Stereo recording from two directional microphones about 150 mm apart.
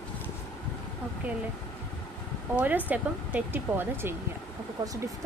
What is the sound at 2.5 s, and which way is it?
Speech, 10° right (ahead or behind).